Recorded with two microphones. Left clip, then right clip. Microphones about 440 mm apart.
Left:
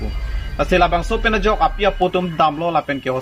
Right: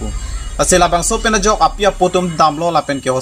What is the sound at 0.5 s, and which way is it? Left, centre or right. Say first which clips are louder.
Speech: right 4 dB; left.